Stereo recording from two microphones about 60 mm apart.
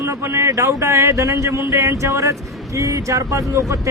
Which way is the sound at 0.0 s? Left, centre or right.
Right.